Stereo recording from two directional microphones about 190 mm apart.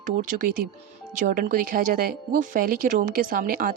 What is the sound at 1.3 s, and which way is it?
Speech, 45° right (ahead or behind).